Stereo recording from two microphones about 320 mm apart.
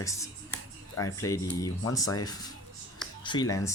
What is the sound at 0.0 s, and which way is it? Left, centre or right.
Speech, centre.